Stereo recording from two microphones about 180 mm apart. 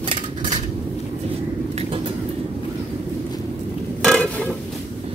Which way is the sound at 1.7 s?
30° right (ahead or behind).